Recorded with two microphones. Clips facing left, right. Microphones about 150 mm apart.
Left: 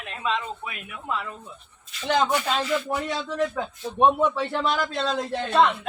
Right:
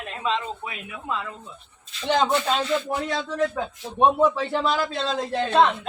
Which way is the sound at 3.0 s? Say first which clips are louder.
Right 1 dB; 5° right (ahead or behind).